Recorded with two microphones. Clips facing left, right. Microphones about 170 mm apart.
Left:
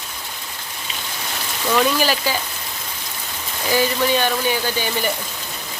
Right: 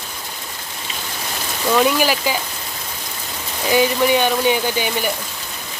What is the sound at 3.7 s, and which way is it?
Speech, 15° right (ahead or behind).